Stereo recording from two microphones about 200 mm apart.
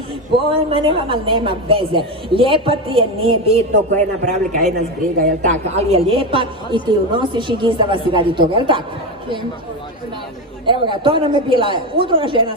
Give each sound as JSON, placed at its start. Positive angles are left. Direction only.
{"t": 0.3, "sound": "a woman's voice", "side_deg": -25}
{"t": 5.2, "sound": "a woman's voice", "side_deg": -40}
{"t": 10.7, "sound": "a woman's voice", "side_deg": -25}